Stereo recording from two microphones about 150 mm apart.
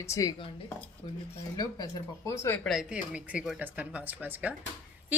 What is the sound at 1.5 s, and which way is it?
Speech, 25° left (ahead or behind).